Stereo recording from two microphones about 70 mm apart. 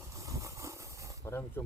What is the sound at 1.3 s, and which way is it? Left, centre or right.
Speech, left.